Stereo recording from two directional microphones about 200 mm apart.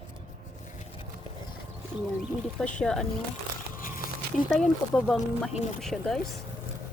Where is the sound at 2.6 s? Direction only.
5° left (ahead or behind).